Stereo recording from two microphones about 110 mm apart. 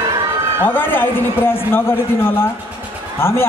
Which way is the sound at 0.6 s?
20° left (ahead or behind).